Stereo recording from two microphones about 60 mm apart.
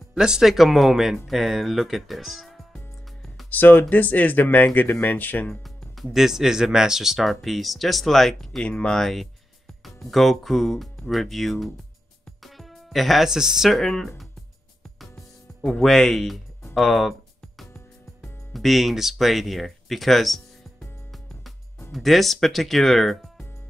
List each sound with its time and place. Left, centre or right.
0.1 s speech: centre
3.4 s speech: left
5.6 s speech: centre
15.6 s speech: centre
18.5 s speech: centre
21.9 s speech: centre